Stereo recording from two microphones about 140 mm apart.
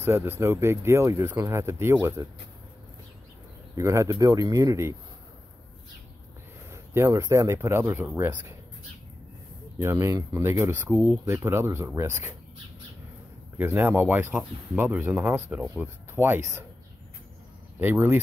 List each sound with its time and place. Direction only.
0.0 s speech: 15° right (ahead or behind)
3.7 s speech: 20° right (ahead or behind)
6.7 s speech: 20° right (ahead or behind)
9.8 s speech: 20° right (ahead or behind)
13.6 s speech: 15° right (ahead or behind)
17.7 s speech: 15° right (ahead or behind)